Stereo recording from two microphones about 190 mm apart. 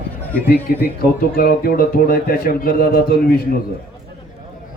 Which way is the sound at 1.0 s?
50° left (ahead or behind).